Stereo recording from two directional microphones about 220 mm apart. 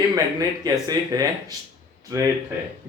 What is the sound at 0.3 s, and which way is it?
Speech, 15° right (ahead or behind).